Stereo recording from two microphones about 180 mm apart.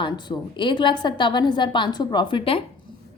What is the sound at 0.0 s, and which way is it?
A woman's voice, 25° left (ahead or behind).